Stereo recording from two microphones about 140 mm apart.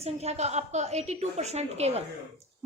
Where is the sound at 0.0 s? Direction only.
50° right (ahead or behind).